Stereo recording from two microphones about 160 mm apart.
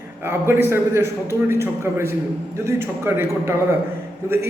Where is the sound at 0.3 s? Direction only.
15° right (ahead or behind).